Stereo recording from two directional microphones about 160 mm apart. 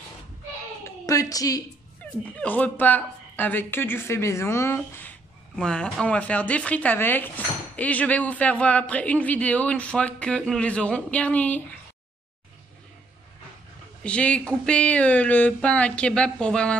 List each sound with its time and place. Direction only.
0.8 s a sound: 20° left (ahead or behind)
2.3 s speech: 10° left (ahead or behind)
14.0 s speech: 5° left (ahead or behind)